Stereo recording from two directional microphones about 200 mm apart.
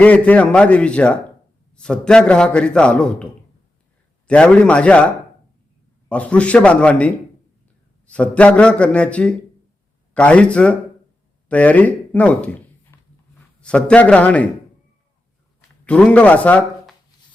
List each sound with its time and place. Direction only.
0.0 s a man's voice: 5° left (ahead or behind)
4.3 s a man's voice: 5° left (ahead or behind)
12.9 s a sound: 10° left (ahead or behind)
13.6 s speech: 5° left (ahead or behind)
15.8 s speech: 5° left (ahead or behind)